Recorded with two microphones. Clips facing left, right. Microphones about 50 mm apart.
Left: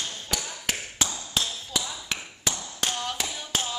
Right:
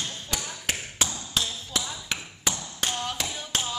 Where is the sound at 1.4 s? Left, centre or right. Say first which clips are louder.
Even; centre.